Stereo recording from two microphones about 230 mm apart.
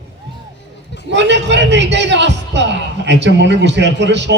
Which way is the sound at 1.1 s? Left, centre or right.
Right.